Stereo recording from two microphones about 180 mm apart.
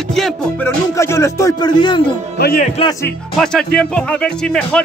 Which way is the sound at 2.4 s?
60° left (ahead or behind).